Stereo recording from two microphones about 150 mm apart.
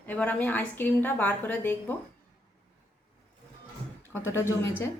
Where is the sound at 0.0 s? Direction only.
10° left (ahead or behind).